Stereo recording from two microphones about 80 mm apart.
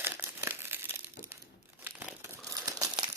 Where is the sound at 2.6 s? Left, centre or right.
Right.